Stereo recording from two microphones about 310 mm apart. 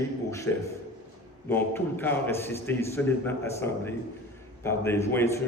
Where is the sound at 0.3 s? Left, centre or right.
Centre.